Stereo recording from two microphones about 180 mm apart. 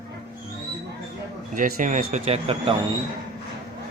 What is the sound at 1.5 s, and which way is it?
Speech, 45° right (ahead or behind).